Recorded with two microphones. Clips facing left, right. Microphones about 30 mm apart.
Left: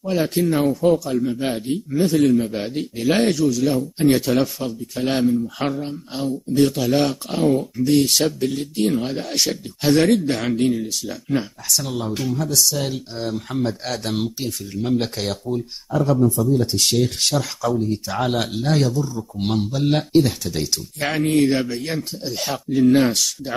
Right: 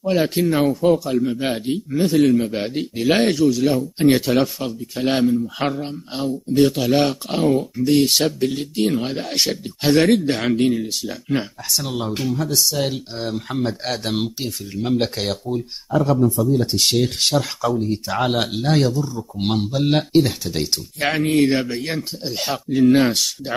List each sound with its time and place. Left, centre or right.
0.0 s speech: centre
4.1 s speech: centre
5.6 s speech: centre
16.5 s speech: centre